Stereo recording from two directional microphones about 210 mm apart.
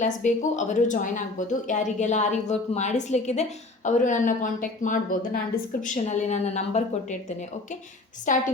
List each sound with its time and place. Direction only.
0.0 s a woman's voice: 35° left (ahead or behind)
8.3 s a woman's voice: 35° left (ahead or behind)